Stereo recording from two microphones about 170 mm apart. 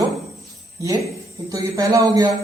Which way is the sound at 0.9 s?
20° right (ahead or behind).